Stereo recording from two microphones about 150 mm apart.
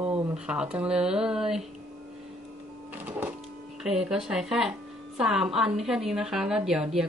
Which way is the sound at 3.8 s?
5° right (ahead or behind).